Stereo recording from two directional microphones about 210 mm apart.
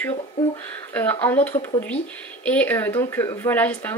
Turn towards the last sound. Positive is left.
turn(degrees=10)  # may be behind; listen again after turning